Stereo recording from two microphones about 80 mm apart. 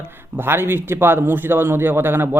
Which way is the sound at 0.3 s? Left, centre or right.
Right.